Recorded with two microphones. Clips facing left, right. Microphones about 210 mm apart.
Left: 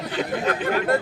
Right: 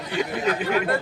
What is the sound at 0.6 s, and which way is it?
Speech, 45° left (ahead or behind).